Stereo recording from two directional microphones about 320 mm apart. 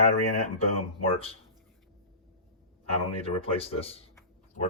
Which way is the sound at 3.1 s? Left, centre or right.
Centre.